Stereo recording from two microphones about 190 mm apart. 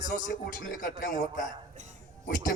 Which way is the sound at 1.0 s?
45° left (ahead or behind).